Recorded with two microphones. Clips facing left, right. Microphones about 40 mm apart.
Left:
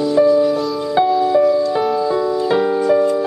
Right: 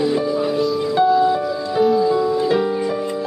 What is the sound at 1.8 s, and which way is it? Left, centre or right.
Music, centre.